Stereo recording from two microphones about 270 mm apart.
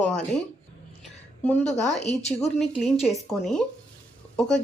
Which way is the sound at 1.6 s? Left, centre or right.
Centre.